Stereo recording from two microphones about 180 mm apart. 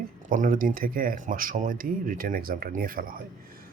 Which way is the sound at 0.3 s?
50° right (ahead or behind).